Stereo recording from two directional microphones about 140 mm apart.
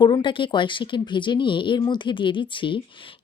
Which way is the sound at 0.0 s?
35° left (ahead or behind).